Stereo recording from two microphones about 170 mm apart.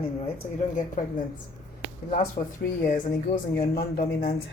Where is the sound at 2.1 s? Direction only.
50° left (ahead or behind).